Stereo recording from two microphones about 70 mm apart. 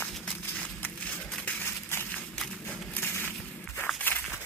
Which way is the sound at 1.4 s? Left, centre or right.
Left.